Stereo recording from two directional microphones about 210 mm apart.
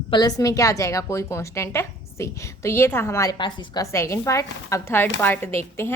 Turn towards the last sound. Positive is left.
turn(degrees=10)  # may be behind; listen again after turning